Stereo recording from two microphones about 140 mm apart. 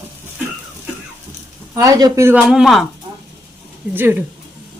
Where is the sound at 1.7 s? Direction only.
25° right (ahead or behind).